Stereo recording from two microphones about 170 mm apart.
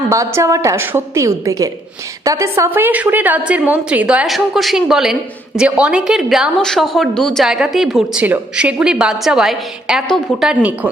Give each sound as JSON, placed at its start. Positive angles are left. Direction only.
{"t": 0.3, "sound": "a woman's voice", "side_deg": -20}